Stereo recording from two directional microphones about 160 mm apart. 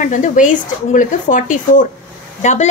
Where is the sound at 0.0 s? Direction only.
50° left (ahead or behind).